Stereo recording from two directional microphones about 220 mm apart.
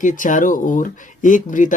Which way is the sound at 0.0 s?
35° left (ahead or behind).